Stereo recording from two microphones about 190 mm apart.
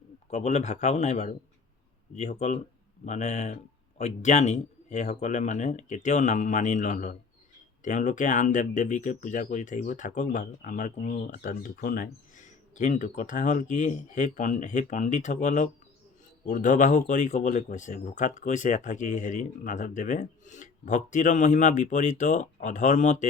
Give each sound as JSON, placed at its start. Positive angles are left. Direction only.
{"t": 0.3, "sound": "speech", "side_deg": 35}